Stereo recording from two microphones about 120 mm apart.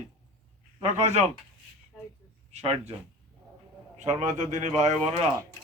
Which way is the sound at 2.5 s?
60° right (ahead or behind).